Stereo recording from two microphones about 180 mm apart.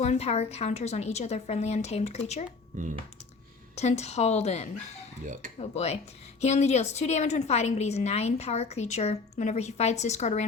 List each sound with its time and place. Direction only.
0.0 s a woman's voice: 35° left (ahead or behind)
3.8 s a woman's voice: 40° left (ahead or behind)